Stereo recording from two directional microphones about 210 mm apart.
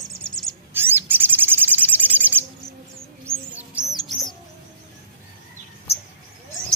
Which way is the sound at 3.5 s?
5° right (ahead or behind).